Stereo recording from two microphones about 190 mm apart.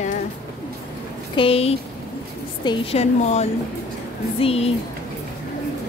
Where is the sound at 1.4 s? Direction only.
30° left (ahead or behind).